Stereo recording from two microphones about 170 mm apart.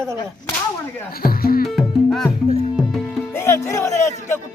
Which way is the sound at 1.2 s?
60° left (ahead or behind).